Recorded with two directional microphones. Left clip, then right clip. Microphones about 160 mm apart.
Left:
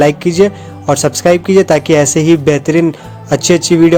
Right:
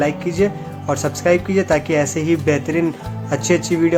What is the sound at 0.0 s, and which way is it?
Speech, 55° left (ahead or behind).